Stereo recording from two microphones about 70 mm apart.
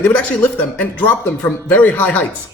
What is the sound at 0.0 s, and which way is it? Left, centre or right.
Speech, left.